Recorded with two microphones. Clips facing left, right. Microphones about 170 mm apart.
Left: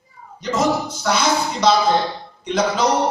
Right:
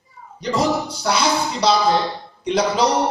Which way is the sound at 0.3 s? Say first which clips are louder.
Even; 35° right (ahead or behind).